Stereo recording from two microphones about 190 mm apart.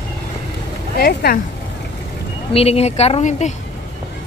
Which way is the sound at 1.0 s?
55° left (ahead or behind).